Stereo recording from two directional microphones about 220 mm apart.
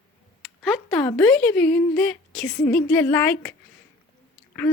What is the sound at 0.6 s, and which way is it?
Speech, 5° left (ahead or behind).